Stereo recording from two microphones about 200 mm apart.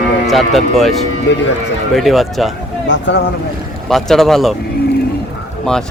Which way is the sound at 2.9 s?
65° left (ahead or behind).